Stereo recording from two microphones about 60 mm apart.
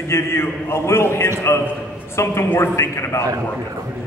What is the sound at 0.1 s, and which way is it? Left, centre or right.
A man's voice, left.